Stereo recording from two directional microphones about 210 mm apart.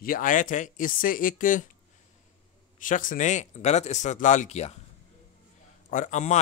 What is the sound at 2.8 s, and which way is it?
Speech, 40° left (ahead or behind).